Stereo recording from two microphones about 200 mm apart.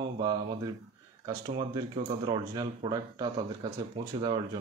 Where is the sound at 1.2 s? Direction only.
20° right (ahead or behind).